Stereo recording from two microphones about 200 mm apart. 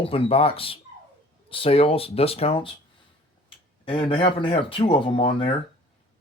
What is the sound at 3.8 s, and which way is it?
Speech, 25° left (ahead or behind).